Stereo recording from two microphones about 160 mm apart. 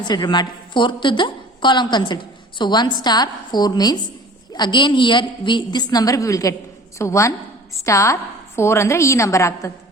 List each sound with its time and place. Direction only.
0.1 s a woman's voice: 25° left (ahead or behind)